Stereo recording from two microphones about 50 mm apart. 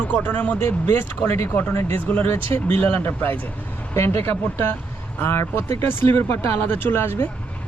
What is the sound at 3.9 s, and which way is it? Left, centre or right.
Speech, left.